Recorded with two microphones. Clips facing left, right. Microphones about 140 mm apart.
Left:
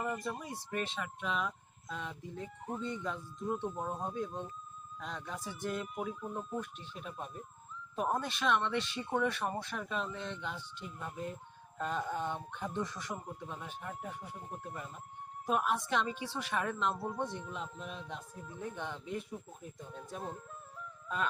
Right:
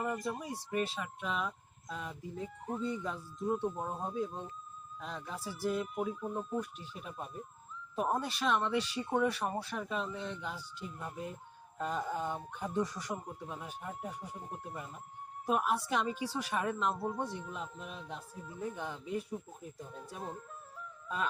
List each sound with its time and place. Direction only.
0.0 s a woman's voice: 5° right (ahead or behind)
14.3 s a woman's voice: centre (ahead or behind)